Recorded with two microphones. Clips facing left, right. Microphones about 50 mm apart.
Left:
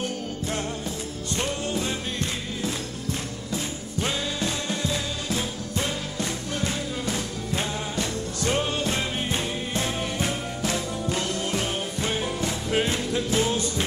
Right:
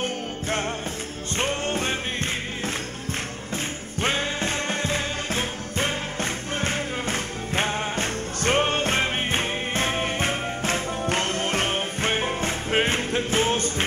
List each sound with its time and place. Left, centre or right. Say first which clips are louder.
0.0 s music: right 1 dB; right
4.0 s music: right 3 dB; right